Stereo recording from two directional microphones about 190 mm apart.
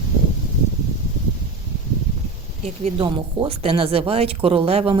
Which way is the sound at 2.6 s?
35° right (ahead or behind).